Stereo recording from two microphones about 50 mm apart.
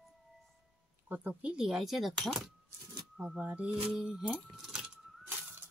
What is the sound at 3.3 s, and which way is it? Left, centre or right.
Speech, right.